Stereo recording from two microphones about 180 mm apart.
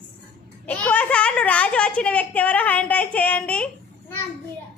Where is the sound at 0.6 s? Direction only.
5° left (ahead or behind).